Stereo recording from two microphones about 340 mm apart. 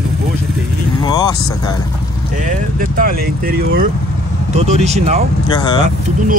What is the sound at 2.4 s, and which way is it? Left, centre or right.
Speech, right.